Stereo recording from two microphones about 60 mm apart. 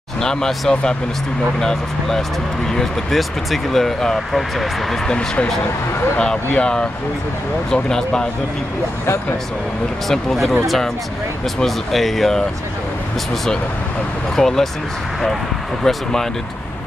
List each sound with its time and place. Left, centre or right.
0.2 s speech: centre
5.1 s speech: centre
10.0 s speech: centre
11.6 s speech: centre
14.3 s speech: centre
15.8 s speech: centre